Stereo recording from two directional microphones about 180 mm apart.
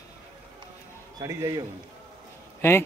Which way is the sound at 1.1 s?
20° right (ahead or behind).